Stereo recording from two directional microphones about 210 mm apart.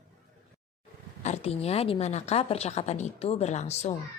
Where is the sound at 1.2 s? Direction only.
30° left (ahead or behind).